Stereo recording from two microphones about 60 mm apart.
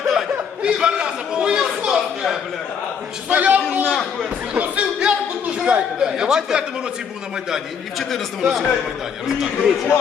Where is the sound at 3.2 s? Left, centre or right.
Right.